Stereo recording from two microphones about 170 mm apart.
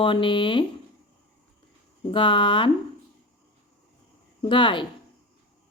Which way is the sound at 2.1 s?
30° left (ahead or behind).